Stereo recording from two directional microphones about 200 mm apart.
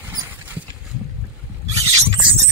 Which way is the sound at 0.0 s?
15° right (ahead or behind).